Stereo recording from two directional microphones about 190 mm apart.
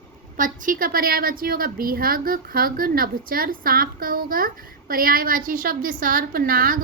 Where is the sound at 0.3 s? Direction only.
45° right (ahead or behind).